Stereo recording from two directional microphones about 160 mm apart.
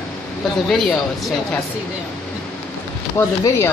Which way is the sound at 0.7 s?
Centre (ahead or behind).